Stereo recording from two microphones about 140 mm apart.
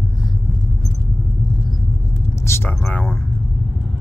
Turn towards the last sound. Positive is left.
turn(degrees=15)  # may be behind; listen again after turning